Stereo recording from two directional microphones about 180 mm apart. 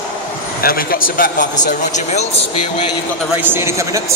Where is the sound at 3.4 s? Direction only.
15° right (ahead or behind).